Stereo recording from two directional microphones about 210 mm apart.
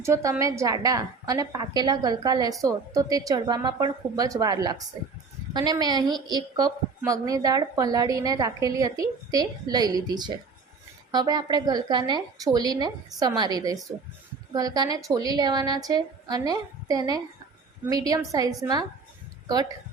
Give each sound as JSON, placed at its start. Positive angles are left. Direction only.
{"t": 0.0, "sound": "a woman's voice", "side_deg": -15}